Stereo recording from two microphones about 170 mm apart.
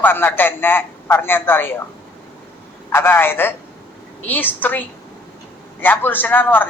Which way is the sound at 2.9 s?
15° left (ahead or behind).